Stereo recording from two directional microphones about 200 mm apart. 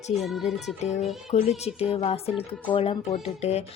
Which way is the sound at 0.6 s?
35° left (ahead or behind).